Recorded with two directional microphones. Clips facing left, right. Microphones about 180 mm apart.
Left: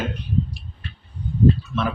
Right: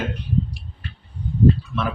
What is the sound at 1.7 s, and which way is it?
Speech, 15° right (ahead or behind).